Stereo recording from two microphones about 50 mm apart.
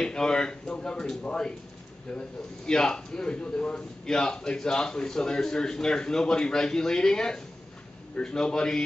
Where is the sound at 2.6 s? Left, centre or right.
Centre.